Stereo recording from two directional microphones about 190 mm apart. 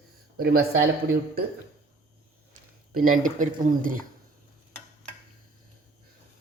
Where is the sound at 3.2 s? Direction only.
45° right (ahead or behind).